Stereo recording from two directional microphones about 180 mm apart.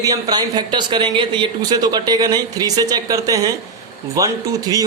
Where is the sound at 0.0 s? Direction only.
20° right (ahead or behind).